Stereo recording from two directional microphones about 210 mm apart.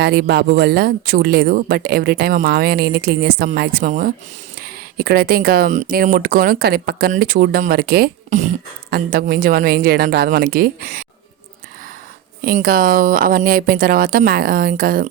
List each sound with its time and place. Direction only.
0.0 s speech: 50° right (ahead or behind)
12.5 s speech: 45° right (ahead or behind)